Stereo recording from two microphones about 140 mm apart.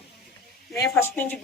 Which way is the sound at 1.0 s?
10° left (ahead or behind).